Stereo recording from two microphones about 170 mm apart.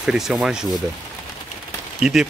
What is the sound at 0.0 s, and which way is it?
Speech, 5° right (ahead or behind).